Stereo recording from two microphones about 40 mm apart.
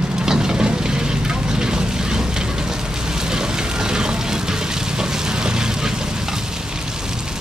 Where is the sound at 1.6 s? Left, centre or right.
Centre.